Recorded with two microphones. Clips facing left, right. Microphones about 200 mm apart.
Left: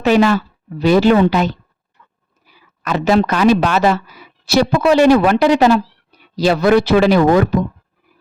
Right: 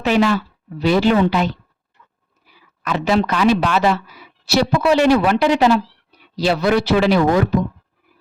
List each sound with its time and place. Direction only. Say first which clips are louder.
0.0 s speech: left 4 dB; 45° left (ahead or behind)
2.0 s dog: left 2 dB; 55° left (ahead or behind)
2.8 s speech: left 3 dB; 45° left (ahead or behind)